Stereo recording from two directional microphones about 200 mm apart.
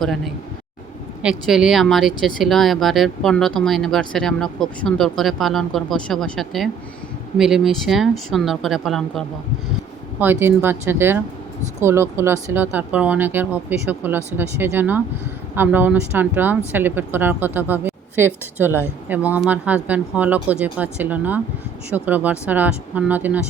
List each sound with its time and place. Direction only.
1.2 s speech: 5° right (ahead or behind)
10.2 s speech: 10° right (ahead or behind)